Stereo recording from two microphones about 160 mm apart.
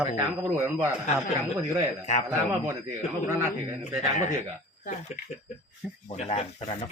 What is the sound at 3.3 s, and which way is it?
Speech, 20° right (ahead or behind).